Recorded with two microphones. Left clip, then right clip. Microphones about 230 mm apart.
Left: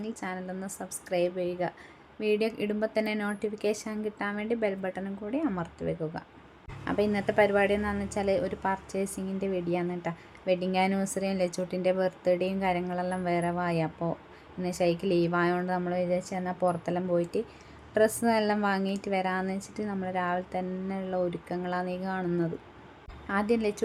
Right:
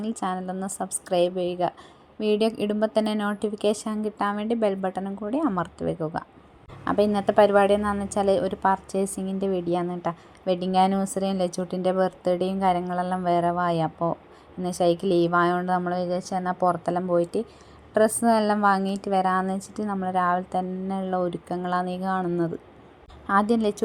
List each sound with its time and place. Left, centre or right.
0.0 s a woman's voice: centre
6.8 s a woman's voice: centre
16.1 s a woman's voice: centre
16.6 s a woman's voice: centre